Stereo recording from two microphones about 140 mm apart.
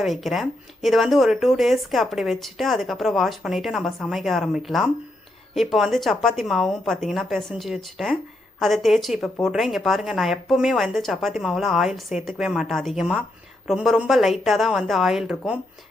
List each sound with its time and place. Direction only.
0.0 s speech: centre (ahead or behind)